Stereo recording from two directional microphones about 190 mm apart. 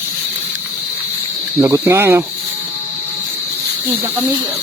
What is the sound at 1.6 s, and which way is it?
Speech, 15° right (ahead or behind).